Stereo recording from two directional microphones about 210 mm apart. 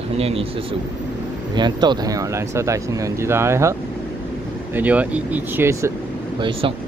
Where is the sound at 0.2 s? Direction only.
30° right (ahead or behind).